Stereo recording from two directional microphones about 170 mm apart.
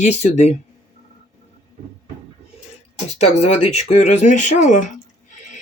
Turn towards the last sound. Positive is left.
turn(degrees=45)  # may be behind; listen again after turning